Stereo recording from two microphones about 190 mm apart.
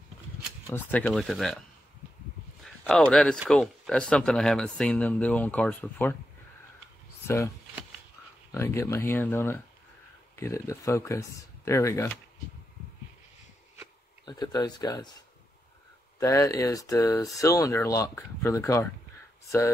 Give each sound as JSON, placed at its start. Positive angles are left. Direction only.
{"t": 0.7, "sound": "speech", "side_deg": 10}
{"t": 2.6, "sound": "speech", "side_deg": 5}
{"t": 7.2, "sound": "speech", "side_deg": 15}
{"t": 14.2, "sound": "speech", "side_deg": 20}
{"t": 16.2, "sound": "speech", "side_deg": 15}